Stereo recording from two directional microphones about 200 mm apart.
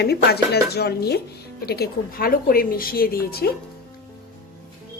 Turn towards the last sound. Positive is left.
turn(degrees=50)  # may be behind; listen again after turning